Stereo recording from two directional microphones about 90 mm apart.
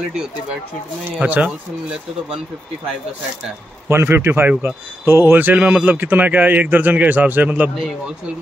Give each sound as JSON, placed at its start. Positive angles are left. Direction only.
{"t": 1.2, "sound": "speech", "side_deg": -15}
{"t": 3.9, "sound": "speech", "side_deg": -25}